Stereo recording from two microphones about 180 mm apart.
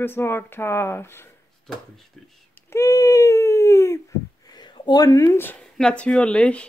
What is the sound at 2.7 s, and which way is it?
Speech, 15° left (ahead or behind).